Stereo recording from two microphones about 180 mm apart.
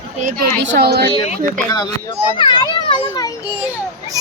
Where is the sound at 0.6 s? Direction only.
75° right (ahead or behind).